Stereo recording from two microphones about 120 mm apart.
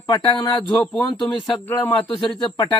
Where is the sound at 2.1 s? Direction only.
5° left (ahead or behind).